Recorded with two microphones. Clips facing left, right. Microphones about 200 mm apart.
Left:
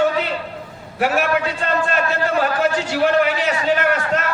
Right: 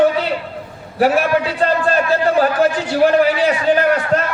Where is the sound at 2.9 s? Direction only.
35° right (ahead or behind).